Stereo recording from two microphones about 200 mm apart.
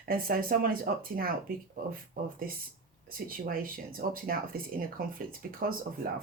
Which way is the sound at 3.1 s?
45° right (ahead or behind).